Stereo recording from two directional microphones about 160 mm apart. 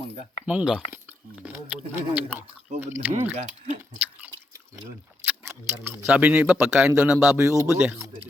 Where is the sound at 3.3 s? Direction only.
45° right (ahead or behind).